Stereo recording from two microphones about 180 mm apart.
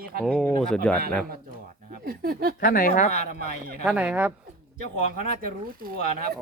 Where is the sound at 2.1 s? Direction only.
55° right (ahead or behind).